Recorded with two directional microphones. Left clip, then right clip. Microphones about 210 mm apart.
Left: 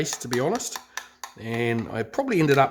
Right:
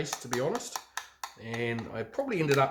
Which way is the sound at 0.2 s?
55° left (ahead or behind).